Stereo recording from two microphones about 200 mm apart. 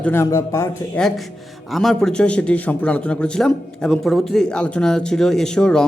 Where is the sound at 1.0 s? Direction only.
Centre (ahead or behind).